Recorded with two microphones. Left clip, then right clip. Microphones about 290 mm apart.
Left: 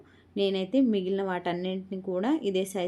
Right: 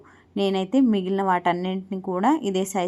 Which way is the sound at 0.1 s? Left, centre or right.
Centre.